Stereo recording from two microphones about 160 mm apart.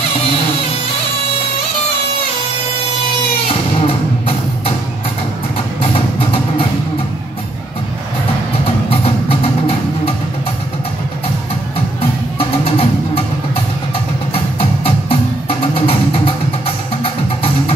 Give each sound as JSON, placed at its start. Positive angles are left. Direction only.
{"t": 3.4, "sound": "music", "side_deg": 35}
{"t": 8.9, "sound": "music", "side_deg": 35}
{"t": 12.4, "sound": "music", "side_deg": 35}
{"t": 14.3, "sound": "music", "side_deg": 35}
{"t": 17.0, "sound": "music", "side_deg": 35}